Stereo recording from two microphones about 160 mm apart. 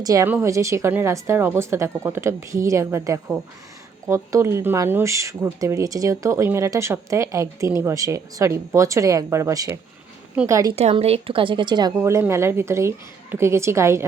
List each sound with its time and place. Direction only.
0.0 s speech: 20° right (ahead or behind)
10.8 s speech: 40° right (ahead or behind); by 14.0 s 15° right (ahead or behind)